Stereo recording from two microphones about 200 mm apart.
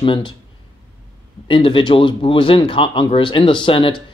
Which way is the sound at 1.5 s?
25° left (ahead or behind).